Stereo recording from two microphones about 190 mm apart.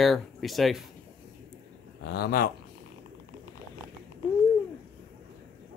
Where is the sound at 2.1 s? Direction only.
55° left (ahead or behind).